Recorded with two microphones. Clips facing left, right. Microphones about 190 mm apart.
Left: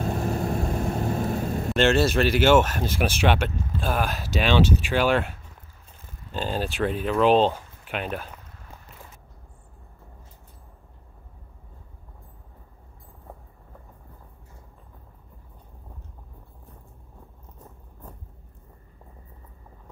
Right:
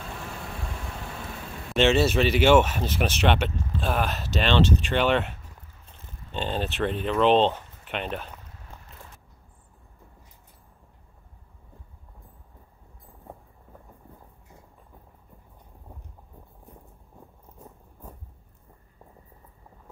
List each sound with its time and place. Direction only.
0.0 s vehicle: 45° left (ahead or behind)
1.7 s speech: centre (ahead or behind)